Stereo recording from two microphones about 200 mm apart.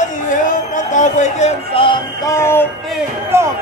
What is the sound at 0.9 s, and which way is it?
Music, 40° left (ahead or behind).